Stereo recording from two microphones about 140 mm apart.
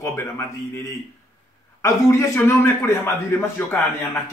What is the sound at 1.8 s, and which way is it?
A man's voice, 20° left (ahead or behind).